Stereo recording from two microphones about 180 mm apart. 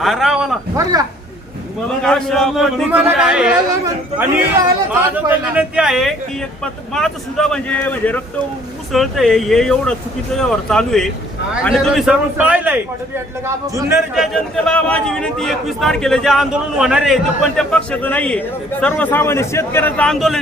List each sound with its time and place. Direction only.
0.0 s a man's voice: centre (ahead or behind)
0.8 s speech: 20° right (ahead or behind)
2.0 s a man's voice: 5° left (ahead or behind)
3.7 s speech: 20° right (ahead or behind)
5.1 s a man's voice: 5° right (ahead or behind)
14.2 s a man's voice: 5° left (ahead or behind)